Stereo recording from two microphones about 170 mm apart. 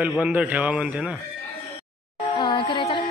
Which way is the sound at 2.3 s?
25° left (ahead or behind).